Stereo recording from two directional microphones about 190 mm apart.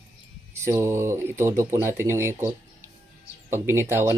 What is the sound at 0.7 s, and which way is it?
Speech, 15° right (ahead or behind).